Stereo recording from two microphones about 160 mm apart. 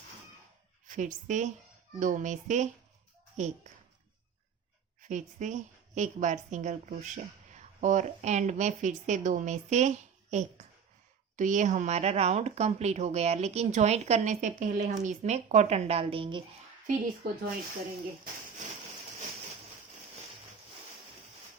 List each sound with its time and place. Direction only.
0.9 s a woman's voice: 55° right (ahead or behind)
5.0 s a woman's voice: 50° right (ahead or behind); by 16.4 s 35° right (ahead or behind)
16.8 s a woman's voice: 60° right (ahead or behind)